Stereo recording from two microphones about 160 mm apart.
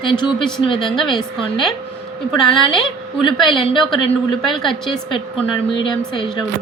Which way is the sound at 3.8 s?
Centre (ahead or behind).